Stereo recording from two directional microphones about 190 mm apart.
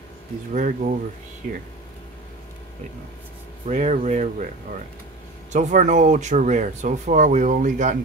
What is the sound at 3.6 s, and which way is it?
Speech, 40° right (ahead or behind).